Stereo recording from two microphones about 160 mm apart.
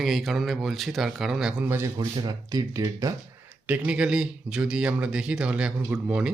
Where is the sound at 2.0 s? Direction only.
25° right (ahead or behind).